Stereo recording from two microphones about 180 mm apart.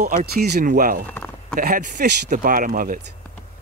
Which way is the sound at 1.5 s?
50° right (ahead or behind).